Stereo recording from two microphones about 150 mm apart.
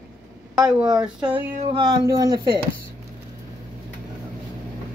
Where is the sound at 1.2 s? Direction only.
35° right (ahead or behind).